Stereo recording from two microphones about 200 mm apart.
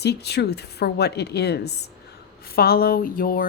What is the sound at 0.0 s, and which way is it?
Speech, 55° left (ahead or behind).